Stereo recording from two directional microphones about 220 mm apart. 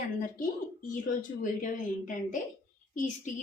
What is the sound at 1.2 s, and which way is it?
Speech, 35° left (ahead or behind).